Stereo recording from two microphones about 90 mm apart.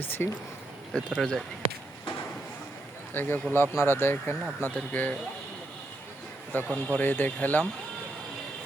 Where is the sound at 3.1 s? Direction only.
25° left (ahead or behind).